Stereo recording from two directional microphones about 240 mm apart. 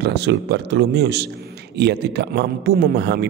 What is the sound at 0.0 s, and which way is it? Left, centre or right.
A man's voice, right.